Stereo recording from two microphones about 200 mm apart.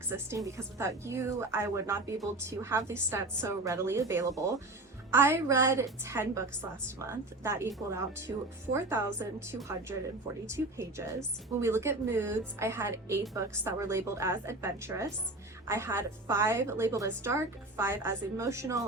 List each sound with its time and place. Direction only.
0.1 s speech: 15° right (ahead or behind)